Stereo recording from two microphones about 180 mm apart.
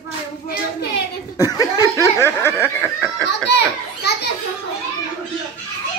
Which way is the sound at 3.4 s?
65° left (ahead or behind).